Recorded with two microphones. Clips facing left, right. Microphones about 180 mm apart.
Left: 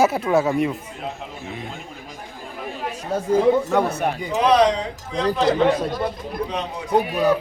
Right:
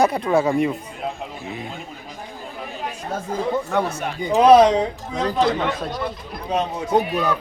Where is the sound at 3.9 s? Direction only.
55° left (ahead or behind).